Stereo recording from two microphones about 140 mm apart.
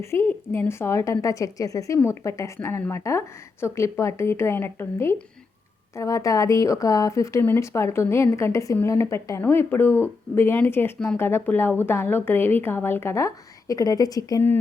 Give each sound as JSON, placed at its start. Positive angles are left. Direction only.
{"t": 0.0, "sound": "a woman's voice", "side_deg": 20}